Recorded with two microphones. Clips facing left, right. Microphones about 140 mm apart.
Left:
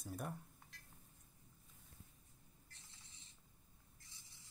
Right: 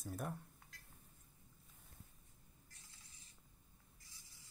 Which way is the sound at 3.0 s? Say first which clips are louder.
Even; 25° left (ahead or behind).